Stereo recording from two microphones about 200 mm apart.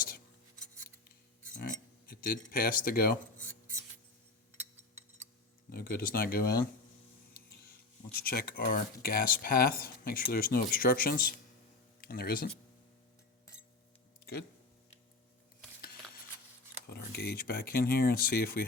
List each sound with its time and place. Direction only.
1.6 s speech: 45° left (ahead or behind)
5.7 s speech: 45° left (ahead or behind)
8.2 s speech: 50° left (ahead or behind)
16.8 s speech: 55° left (ahead or behind)